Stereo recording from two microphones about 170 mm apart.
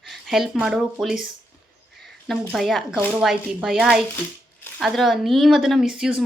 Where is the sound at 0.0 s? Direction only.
Centre (ahead or behind).